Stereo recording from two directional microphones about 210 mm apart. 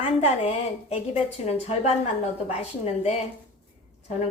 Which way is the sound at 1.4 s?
30° left (ahead or behind).